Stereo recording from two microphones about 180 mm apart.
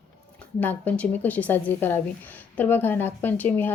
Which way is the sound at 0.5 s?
10° left (ahead or behind).